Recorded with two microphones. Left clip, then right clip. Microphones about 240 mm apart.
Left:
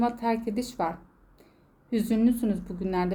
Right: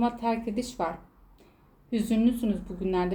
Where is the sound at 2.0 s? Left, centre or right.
Left.